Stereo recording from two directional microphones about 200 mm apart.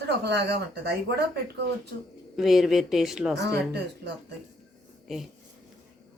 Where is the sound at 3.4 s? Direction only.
60° right (ahead or behind).